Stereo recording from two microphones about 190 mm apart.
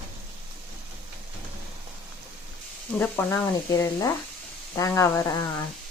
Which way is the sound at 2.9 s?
10° left (ahead or behind).